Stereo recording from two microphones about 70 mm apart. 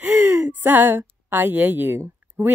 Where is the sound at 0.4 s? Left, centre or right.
Right.